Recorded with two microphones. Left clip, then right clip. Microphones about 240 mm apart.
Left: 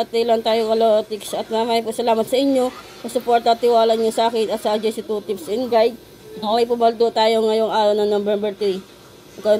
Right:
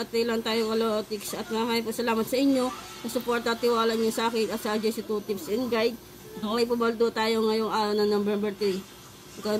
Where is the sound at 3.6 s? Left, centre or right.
Left.